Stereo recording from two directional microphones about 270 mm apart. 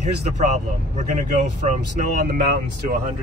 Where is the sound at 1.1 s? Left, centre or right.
Right.